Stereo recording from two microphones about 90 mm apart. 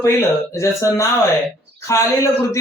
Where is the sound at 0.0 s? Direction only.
30° left (ahead or behind).